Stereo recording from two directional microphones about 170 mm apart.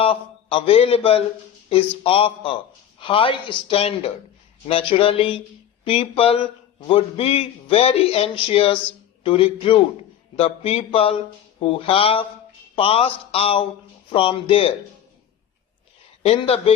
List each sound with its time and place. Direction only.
0.0 s a man's voice: 30° left (ahead or behind)
16.2 s speech: 35° left (ahead or behind)